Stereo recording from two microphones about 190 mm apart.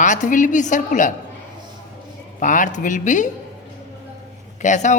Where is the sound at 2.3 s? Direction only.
40° left (ahead or behind).